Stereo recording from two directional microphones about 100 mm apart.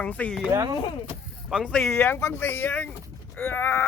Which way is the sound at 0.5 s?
35° right (ahead or behind).